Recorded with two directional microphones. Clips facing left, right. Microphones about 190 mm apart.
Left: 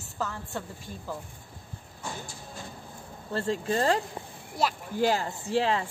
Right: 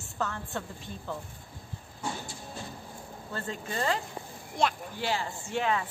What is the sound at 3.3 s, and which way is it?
Speech, 30° left (ahead or behind).